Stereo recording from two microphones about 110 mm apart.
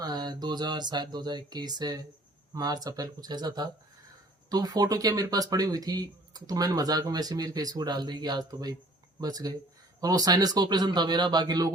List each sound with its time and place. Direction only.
0.0 s speech: 40° right (ahead or behind)